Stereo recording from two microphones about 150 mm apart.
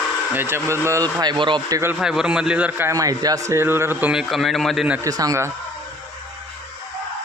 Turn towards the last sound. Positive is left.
turn(degrees=-20)  # may be behind; listen again after turning